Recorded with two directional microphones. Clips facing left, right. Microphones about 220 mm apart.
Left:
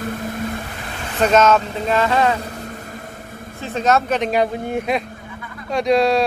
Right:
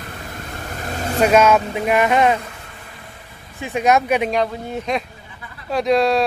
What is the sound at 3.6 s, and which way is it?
Speech, 15° right (ahead or behind).